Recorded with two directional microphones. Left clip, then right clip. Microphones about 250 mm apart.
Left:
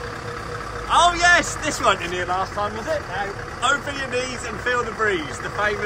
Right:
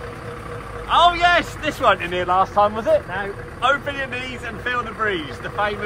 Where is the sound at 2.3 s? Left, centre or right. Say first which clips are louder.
Right 7 dB; centre.